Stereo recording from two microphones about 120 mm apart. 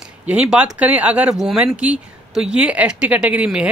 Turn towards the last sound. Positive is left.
turn(degrees=-10)  # may be behind; listen again after turning